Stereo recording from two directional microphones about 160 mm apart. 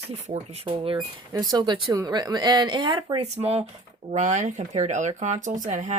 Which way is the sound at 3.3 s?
40° right (ahead or behind).